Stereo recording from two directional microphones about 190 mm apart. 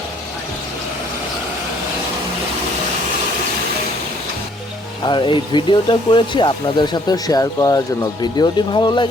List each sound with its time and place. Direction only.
5.0 s speech: 25° left (ahead or behind)